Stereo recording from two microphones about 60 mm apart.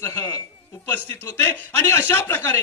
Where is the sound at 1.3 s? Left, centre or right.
Left.